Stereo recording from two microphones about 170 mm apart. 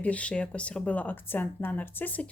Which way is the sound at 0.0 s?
10° left (ahead or behind).